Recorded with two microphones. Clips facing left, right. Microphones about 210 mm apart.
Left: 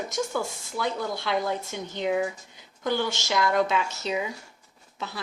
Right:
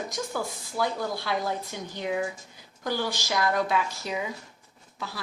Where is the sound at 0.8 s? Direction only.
25° left (ahead or behind).